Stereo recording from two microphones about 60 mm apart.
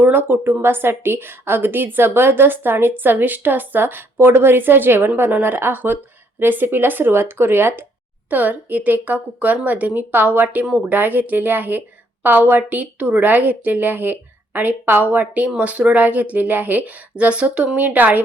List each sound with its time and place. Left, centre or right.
0.0 s speech: right